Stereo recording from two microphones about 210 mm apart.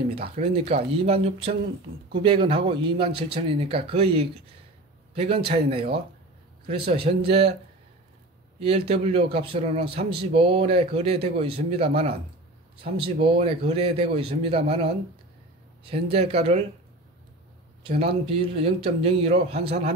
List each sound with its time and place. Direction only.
0.1 s a man's voice: 30° right (ahead or behind)
6.9 s a man's voice: 25° right (ahead or behind)
8.5 s a man's voice: 30° right (ahead or behind)
17.8 s a man's voice: 25° right (ahead or behind)